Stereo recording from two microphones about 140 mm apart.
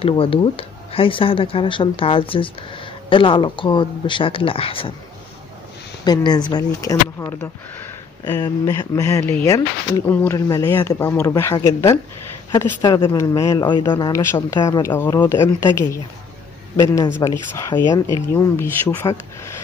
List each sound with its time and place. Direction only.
0.0 s speech: 40° left (ahead or behind)
6.0 s speech: 30° left (ahead or behind)
8.4 s speech: 25° left (ahead or behind)
13.2 s speech: 20° left (ahead or behind)